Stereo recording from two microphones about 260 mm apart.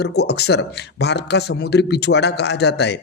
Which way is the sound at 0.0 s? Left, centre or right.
Left.